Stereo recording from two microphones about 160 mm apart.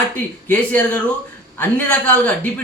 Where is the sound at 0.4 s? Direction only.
10° left (ahead or behind).